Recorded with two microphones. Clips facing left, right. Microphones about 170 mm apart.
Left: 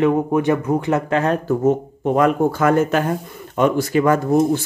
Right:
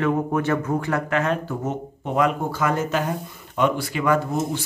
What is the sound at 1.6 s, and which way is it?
Speech, 50° left (ahead or behind).